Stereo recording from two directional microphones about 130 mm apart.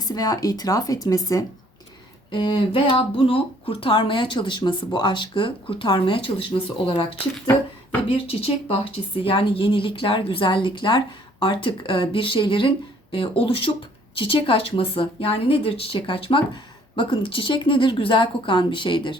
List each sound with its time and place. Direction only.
0.0 s speech: 30° left (ahead or behind)
2.3 s speech: 40° left (ahead or behind)
8.0 s a woman's voice: 45° left (ahead or behind)